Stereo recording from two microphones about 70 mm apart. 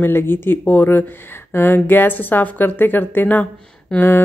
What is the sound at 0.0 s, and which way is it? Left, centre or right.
A woman's voice, left.